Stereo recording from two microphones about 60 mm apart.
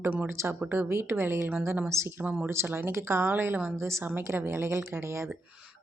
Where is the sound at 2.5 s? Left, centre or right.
Right.